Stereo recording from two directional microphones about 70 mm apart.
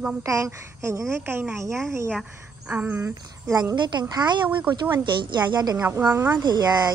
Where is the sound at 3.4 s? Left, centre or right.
Right.